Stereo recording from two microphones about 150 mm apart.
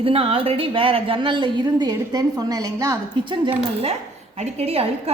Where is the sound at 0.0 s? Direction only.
40° right (ahead or behind).